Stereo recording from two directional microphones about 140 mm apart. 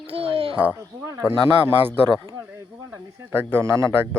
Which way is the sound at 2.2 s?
20° right (ahead or behind).